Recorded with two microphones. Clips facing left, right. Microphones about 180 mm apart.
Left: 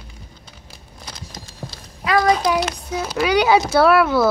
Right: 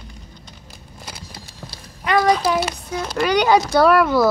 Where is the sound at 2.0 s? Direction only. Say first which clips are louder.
Even; centre (ahead or behind).